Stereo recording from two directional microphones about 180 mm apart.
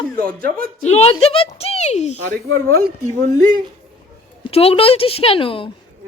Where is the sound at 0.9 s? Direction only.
35° left (ahead or behind).